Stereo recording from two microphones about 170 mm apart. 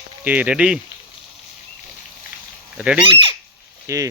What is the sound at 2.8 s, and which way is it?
Speech, 5° right (ahead or behind).